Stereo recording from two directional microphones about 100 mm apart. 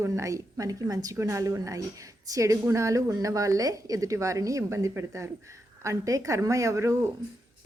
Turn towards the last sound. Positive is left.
turn(degrees=-30)  # may be behind; listen again after turning